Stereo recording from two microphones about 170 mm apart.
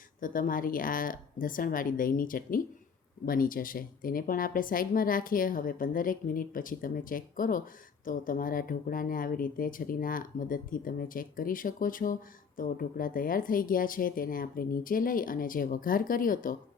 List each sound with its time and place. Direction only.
0.2 s speech: 55° left (ahead or behind)